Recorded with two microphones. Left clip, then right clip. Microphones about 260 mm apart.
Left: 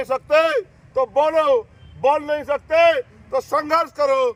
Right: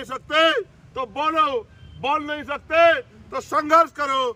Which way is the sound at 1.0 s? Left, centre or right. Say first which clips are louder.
Left 4 dB; centre.